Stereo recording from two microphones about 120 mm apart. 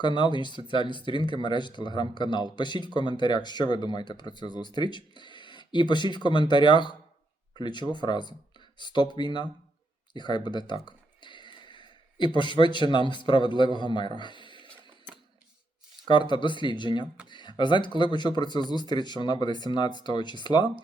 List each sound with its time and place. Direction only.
0.0 s speech: 40° left (ahead or behind)
14.2 s a sound: 40° left (ahead or behind)
16.0 s speech: 40° left (ahead or behind)